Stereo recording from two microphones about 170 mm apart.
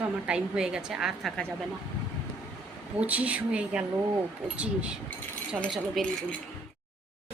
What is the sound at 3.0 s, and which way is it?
Speech, 10° right (ahead or behind).